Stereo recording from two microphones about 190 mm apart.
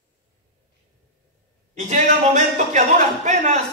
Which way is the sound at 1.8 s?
40° right (ahead or behind).